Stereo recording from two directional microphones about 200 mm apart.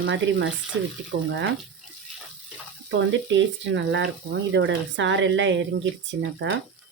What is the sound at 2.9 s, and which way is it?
Speech, 65° right (ahead or behind).